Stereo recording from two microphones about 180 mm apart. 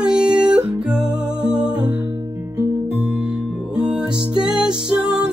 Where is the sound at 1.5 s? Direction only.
30° left (ahead or behind).